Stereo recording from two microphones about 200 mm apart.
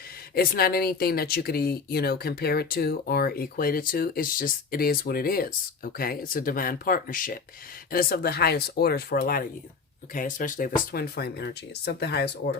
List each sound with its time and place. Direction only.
0.3 s speech: 50° left (ahead or behind)